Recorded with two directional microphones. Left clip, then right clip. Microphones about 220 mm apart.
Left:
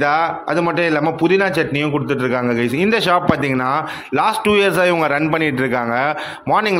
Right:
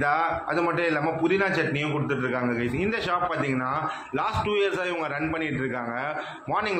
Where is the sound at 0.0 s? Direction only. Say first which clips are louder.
Left 8 dB; 40° left (ahead or behind).